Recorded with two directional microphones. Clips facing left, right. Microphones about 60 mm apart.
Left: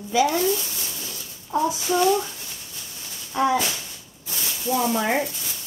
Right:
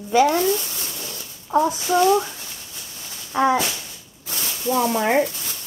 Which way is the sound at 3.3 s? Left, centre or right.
Right.